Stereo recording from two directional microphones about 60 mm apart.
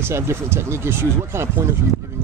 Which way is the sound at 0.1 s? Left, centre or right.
Right.